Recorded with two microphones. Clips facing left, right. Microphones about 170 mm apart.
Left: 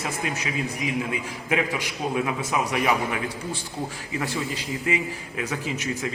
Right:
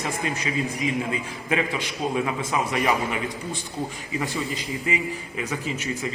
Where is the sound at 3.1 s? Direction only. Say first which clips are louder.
Even; 15° right (ahead or behind).